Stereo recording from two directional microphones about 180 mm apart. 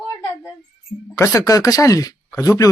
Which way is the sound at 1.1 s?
15° left (ahead or behind).